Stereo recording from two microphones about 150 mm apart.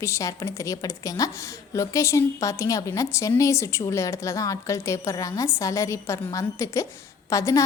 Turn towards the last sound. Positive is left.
turn(degrees=20)  # may be behind; listen again after turning